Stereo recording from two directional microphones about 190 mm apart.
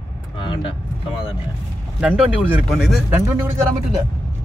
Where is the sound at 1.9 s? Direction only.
5° right (ahead or behind).